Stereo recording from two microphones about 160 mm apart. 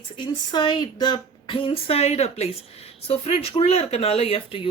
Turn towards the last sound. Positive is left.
turn(degrees=40)  # may be behind; listen again after turning